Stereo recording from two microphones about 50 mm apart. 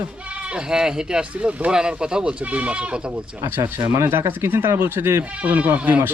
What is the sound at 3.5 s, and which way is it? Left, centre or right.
Speech, right.